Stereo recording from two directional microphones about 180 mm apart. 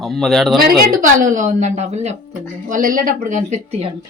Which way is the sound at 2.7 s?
50° right (ahead or behind).